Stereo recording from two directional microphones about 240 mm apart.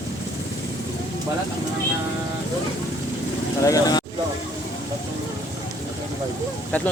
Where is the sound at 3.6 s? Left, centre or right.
Centre.